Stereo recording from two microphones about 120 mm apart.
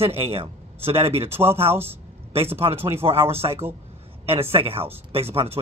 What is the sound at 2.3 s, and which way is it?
Speech, 55° right (ahead or behind).